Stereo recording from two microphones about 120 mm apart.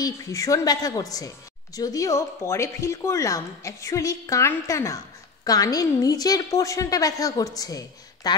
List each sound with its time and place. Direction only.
0.0 s a woman's voice: 25° left (ahead or behind)